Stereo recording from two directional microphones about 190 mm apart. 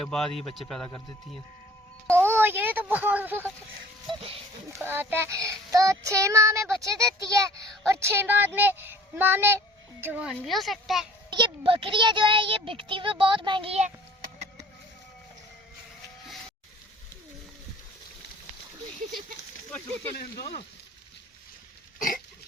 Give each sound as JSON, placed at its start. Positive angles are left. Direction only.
{"t": 0.0, "sound": "a man's voice", "side_deg": 0}
{"t": 2.1, "sound": "a sound", "side_deg": -10}
{"t": 4.7, "sound": "a child's voice", "side_deg": -10}
{"t": 11.3, "sound": "a child's voice", "side_deg": -25}
{"t": 21.9, "sound": "throat clearing", "side_deg": 45}